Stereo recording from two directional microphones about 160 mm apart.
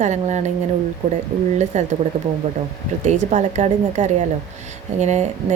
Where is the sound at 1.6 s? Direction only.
45° right (ahead or behind).